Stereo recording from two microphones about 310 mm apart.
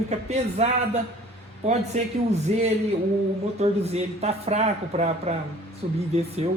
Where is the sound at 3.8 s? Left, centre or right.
Right.